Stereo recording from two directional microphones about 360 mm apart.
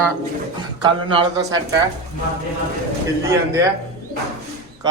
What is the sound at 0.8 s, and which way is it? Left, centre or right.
Speech, centre.